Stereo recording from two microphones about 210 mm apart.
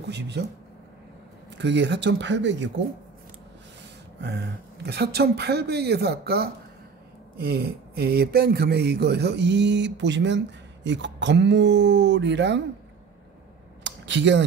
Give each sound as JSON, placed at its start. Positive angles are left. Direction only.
{"t": 1.6, "sound": "speech", "side_deg": -55}
{"t": 4.2, "sound": "speech", "side_deg": -50}
{"t": 13.8, "sound": "a sound", "side_deg": -60}